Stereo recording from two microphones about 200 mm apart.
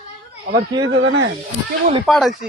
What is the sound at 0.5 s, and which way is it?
Speech, 50° right (ahead or behind).